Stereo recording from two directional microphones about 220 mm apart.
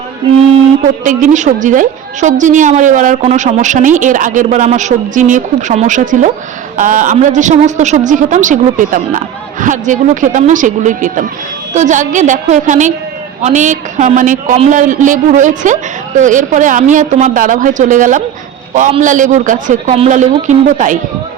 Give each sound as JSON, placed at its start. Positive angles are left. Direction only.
{"t": 1.0, "sound": "a woman's voice", "side_deg": -35}